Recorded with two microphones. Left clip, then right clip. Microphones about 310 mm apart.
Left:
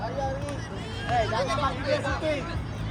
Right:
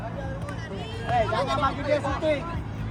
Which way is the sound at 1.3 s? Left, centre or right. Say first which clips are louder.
Right 2 dB; right.